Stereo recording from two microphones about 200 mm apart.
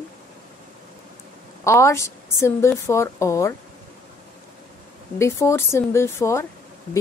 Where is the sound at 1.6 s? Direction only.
15° left (ahead or behind).